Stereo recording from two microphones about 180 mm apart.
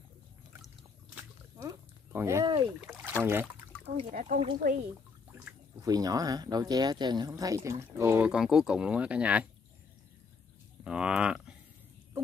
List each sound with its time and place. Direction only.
1.6 s a sound: 20° right (ahead or behind)
2.8 s boat: 10° right (ahead or behind)
3.8 s speech: 35° right (ahead or behind)
4.1 s speech: 50° right (ahead or behind)
5.3 s speech: 15° right (ahead or behind)
10.8 s speech: 5° right (ahead or behind)